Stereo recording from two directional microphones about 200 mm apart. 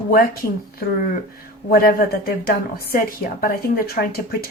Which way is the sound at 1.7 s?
45° left (ahead or behind).